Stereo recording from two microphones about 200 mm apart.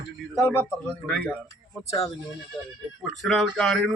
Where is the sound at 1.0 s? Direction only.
10° right (ahead or behind).